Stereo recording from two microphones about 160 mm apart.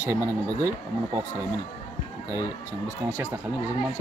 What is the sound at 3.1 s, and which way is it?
Speech, 15° right (ahead or behind).